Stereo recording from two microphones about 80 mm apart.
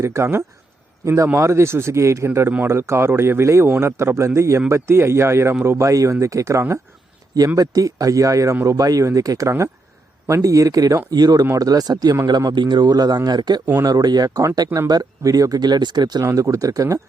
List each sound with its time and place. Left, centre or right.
0.0 s a man's voice: right
7.3 s speech: right
14.3 s speech: right
16.2 s speech: right